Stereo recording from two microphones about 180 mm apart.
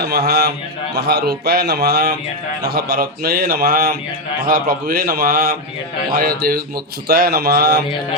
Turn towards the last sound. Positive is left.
turn(degrees=-65)  # may be behind; listen again after turning